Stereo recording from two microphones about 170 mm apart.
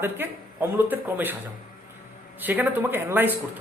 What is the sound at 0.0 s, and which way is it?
A man's voice, 10° right (ahead or behind).